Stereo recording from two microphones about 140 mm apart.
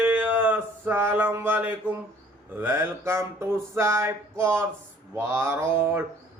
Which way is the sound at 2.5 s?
15° right (ahead or behind).